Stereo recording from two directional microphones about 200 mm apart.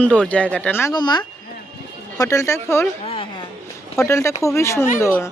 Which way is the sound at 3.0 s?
30° left (ahead or behind).